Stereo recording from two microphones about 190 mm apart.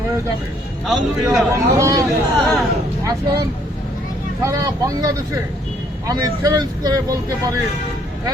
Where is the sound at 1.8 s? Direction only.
15° right (ahead or behind).